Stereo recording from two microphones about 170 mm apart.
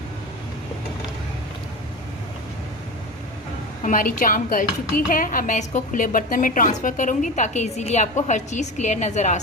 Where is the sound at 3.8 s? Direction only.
50° left (ahead or behind).